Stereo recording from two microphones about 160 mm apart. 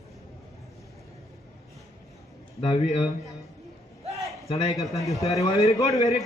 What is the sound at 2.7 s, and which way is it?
Speech, 30° left (ahead or behind).